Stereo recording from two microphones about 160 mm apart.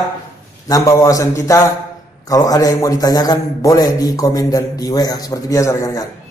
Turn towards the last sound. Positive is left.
turn(degrees=20)  # may be behind; listen again after turning